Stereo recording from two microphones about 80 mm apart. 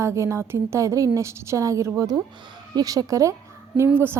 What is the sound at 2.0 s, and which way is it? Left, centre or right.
A woman's voice, right.